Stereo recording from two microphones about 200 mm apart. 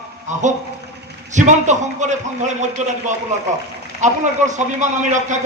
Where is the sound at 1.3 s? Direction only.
35° right (ahead or behind).